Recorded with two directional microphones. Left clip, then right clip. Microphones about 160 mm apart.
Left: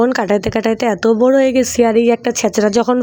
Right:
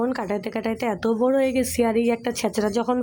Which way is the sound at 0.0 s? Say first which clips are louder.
Left 11 dB; 40° left (ahead or behind).